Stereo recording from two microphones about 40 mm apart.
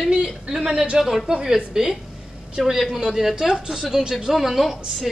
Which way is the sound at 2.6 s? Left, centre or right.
Centre.